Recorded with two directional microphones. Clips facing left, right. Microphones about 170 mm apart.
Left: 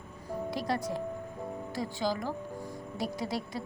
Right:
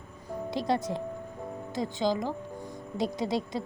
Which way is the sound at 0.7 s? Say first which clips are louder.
Right 5 dB; 20° right (ahead or behind).